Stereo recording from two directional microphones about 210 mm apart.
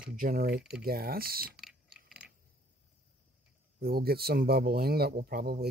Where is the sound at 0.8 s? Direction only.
45° right (ahead or behind).